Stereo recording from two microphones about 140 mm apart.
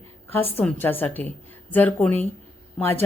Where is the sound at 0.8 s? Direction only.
15° left (ahead or behind).